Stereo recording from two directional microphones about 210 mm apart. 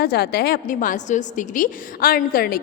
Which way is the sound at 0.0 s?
50° left (ahead or behind).